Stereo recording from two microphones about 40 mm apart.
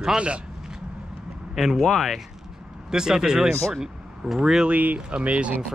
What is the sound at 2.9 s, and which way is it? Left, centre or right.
Speech, centre.